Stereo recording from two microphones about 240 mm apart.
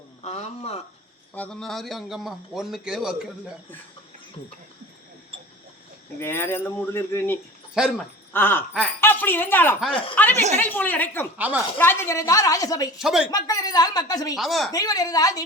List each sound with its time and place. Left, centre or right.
0.2 s speech: left
1.3 s a man's voice: centre
6.1 s speech: centre
7.7 s a man's voice: centre
8.3 s speech: centre
11.3 s speech: centre
11.8 s speech: centre
13.0 s a man's voice: centre
13.3 s speech: centre
14.3 s a man's voice: centre
14.7 s speech: centre